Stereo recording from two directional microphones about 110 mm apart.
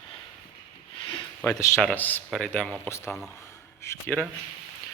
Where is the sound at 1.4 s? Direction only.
25° left (ahead or behind).